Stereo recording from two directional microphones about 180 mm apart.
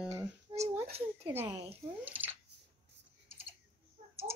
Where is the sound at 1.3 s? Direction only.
15° right (ahead or behind).